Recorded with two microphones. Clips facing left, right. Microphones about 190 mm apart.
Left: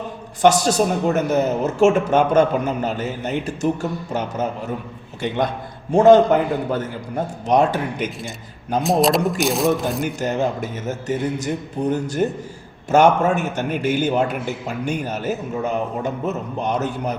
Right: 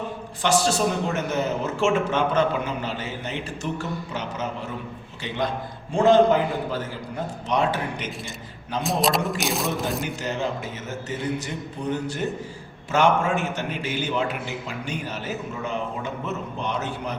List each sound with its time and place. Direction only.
0.4 s a man's voice: 45° left (ahead or behind)
6.0 s a man's voice: 55° left (ahead or behind)
8.8 s speech: centre (ahead or behind)
10.2 s a man's voice: 45° left (ahead or behind)